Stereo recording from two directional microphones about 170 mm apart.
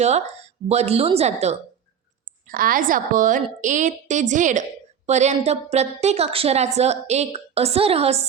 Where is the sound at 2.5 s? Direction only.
55° right (ahead or behind).